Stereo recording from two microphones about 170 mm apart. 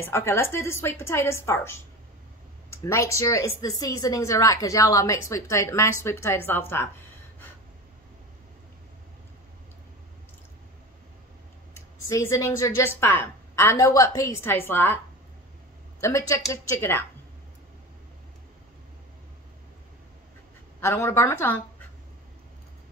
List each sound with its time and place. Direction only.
0.0 s speech: 15° left (ahead or behind)
11.7 s speech: 15° left (ahead or behind)
16.0 s speech: 20° left (ahead or behind)
20.8 s speech: 15° left (ahead or behind)